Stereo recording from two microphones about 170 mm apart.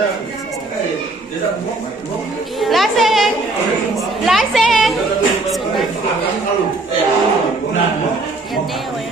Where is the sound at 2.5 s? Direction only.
Centre (ahead or behind).